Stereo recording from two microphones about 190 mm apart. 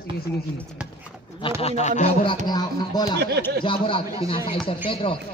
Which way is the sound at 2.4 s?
20° left (ahead or behind).